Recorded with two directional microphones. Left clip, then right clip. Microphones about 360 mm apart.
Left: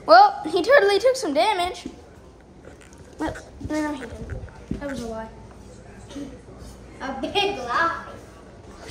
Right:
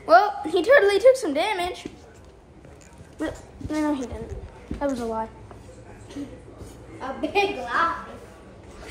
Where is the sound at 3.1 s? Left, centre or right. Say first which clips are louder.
Left 2 dB; centre.